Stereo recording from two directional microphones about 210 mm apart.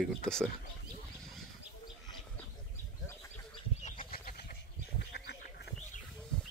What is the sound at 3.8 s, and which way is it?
Goose, 45° left (ahead or behind).